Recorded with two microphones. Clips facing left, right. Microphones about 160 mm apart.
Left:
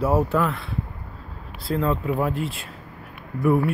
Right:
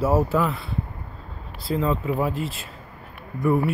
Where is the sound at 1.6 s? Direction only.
Centre (ahead or behind).